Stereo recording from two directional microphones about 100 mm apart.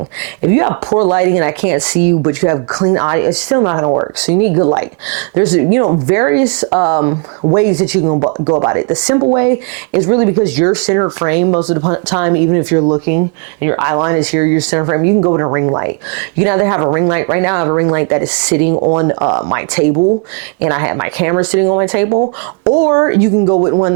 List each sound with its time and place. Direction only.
0.4 s speech: 20° right (ahead or behind)
8.0 s speech: 30° right (ahead or behind)
18.7 s speech: 30° right (ahead or behind)